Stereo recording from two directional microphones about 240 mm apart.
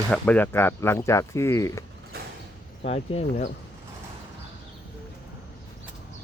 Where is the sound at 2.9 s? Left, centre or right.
Left.